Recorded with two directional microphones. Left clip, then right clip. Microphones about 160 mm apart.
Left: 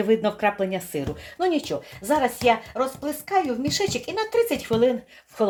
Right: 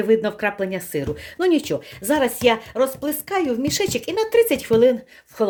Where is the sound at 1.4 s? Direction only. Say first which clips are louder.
Right 4 dB; 50° right (ahead or behind).